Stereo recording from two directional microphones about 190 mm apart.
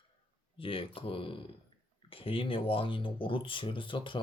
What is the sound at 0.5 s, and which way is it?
Speech, 30° left (ahead or behind).